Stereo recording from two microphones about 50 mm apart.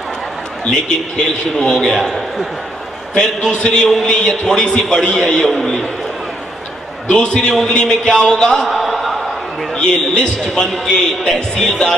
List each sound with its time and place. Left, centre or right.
0.7 s a man's voice: centre
3.2 s a man's voice: centre
7.1 s a man's voice: centre
9.8 s a man's voice: centre